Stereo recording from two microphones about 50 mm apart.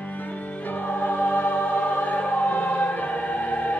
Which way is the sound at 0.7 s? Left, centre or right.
Left.